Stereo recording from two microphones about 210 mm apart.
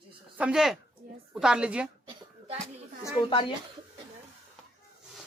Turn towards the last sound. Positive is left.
turn(degrees=20)  # may be behind; listen again after turning